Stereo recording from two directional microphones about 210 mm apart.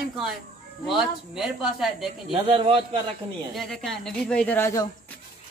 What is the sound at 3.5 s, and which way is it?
A woman's voice, centre (ahead or behind).